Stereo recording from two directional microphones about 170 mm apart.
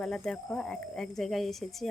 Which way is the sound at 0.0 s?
5° left (ahead or behind).